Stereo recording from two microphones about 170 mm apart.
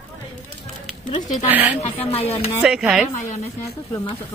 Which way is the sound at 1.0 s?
45° left (ahead or behind).